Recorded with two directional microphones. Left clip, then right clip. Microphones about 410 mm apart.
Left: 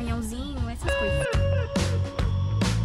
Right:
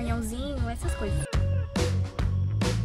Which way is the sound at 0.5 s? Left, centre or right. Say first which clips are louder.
Left 7 dB; centre.